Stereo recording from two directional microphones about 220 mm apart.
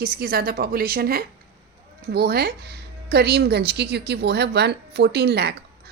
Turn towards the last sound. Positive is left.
turn(degrees=-45)  # may be behind; listen again after turning